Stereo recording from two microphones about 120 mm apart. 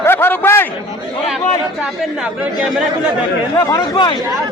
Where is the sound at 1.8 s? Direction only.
10° right (ahead or behind).